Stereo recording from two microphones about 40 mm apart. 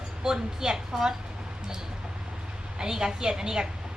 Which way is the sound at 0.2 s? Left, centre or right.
Centre.